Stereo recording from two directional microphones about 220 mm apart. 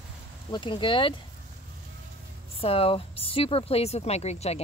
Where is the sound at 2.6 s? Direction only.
25° left (ahead or behind).